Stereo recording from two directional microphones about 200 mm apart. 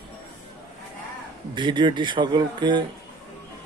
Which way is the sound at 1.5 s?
25° right (ahead or behind).